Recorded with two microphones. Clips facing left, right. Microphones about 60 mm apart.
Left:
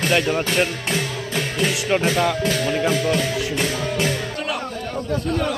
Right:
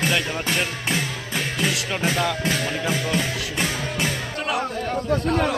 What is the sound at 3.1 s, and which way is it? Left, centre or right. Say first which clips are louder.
Music: left 4 dB; centre.